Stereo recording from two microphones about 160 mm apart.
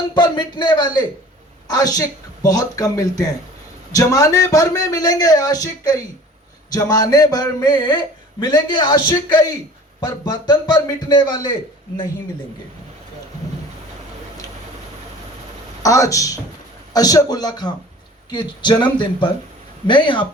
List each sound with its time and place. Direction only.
0.1 s a man's voice: 30° left (ahead or behind)
15.8 s speech: 20° left (ahead or behind)